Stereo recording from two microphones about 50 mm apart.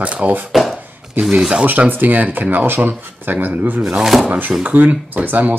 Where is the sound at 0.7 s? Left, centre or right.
Right.